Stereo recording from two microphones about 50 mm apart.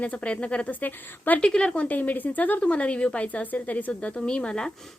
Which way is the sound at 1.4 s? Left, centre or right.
Centre.